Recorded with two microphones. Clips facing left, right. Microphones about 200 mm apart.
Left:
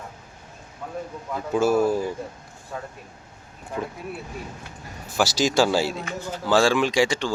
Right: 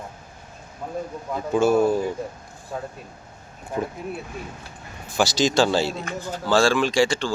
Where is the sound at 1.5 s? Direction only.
5° left (ahead or behind).